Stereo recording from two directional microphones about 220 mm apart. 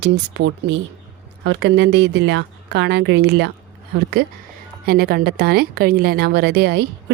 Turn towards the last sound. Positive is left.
turn(degrees=-50)  # may be behind; listen again after turning